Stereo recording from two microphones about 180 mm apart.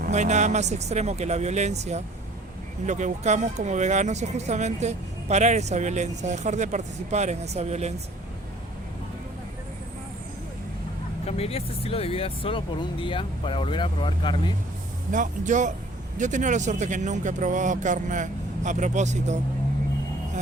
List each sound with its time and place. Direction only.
0.0 s speech: 40° right (ahead or behind)
11.3 s speech: 35° left (ahead or behind)
15.1 s speech: 45° right (ahead or behind)